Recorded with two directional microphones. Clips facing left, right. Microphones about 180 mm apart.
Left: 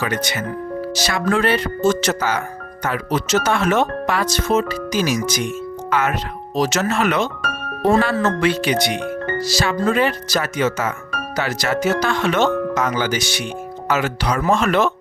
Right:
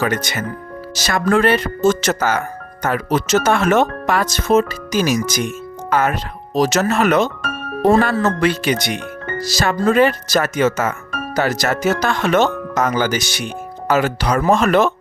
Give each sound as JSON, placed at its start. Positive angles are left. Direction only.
{"t": 0.0, "sound": "speech", "side_deg": -45}